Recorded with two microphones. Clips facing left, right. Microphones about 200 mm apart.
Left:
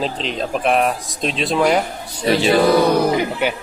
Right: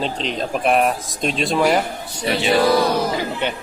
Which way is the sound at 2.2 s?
35° left (ahead or behind).